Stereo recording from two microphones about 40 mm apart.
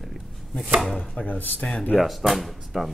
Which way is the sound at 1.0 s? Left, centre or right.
Left.